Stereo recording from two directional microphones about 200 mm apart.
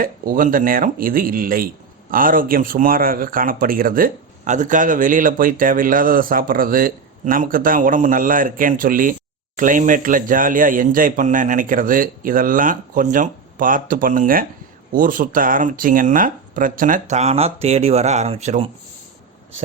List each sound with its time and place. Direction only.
0.0 s speech: 45° right (ahead or behind)